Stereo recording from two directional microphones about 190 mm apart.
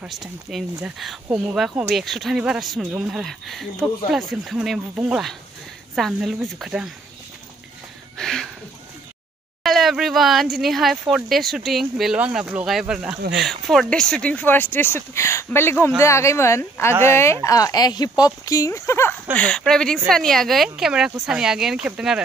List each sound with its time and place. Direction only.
0.0 s speech: centre (ahead or behind)
8.2 s a sound: 5° left (ahead or behind)
9.6 s speech: centre (ahead or behind)